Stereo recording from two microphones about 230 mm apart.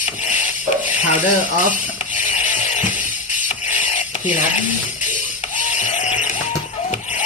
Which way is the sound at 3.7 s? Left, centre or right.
Left.